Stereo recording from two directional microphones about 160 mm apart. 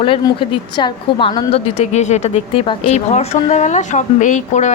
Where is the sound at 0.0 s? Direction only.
35° left (ahead or behind).